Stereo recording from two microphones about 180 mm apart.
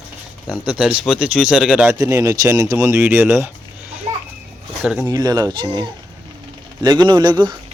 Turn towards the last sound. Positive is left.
turn(degrees=-25)  # may be behind; listen again after turning